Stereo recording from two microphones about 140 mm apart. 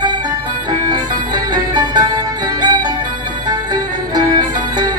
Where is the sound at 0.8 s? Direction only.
30° right (ahead or behind).